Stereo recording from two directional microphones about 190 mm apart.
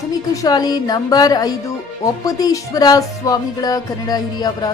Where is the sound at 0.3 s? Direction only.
20° left (ahead or behind).